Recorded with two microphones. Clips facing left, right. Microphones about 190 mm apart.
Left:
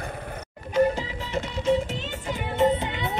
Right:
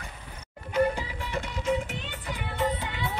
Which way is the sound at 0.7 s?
25° left (ahead or behind).